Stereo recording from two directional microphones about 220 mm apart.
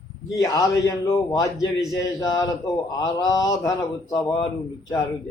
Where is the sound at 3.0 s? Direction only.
15° left (ahead or behind).